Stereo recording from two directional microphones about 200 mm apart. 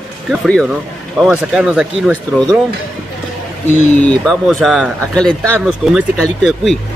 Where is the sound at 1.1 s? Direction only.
5° right (ahead or behind).